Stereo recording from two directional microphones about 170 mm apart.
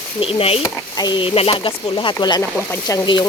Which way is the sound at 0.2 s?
35° left (ahead or behind).